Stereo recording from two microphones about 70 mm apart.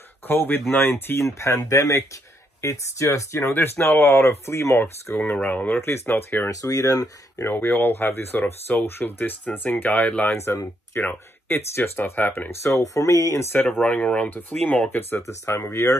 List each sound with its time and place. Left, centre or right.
0.3 s speech: left
1.2 s speech: left
5.1 s speech: left
5.8 s speech: left
6.5 s speech: left
7.4 s speech: left
10.3 s speech: left
12.9 s speech: left
13.6 s speech: centre
15.0 s speech: left